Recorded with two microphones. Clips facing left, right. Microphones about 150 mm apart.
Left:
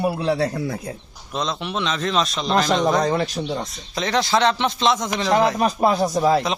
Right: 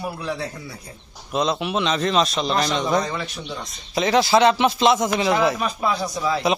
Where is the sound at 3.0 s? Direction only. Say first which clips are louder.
Left 7 dB; 40° left (ahead or behind).